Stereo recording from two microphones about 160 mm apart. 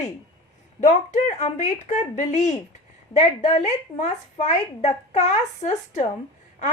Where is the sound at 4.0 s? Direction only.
45° left (ahead or behind).